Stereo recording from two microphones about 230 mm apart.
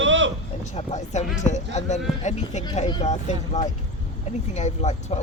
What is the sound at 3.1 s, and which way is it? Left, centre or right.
Speech, left.